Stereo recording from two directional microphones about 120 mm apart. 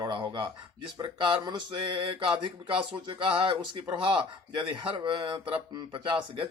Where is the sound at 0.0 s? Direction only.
40° right (ahead or behind).